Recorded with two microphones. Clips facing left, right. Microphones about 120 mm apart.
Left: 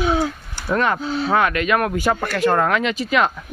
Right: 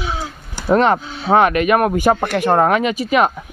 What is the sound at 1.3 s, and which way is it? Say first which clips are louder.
Speech: right 6 dB; 25° right (ahead or behind).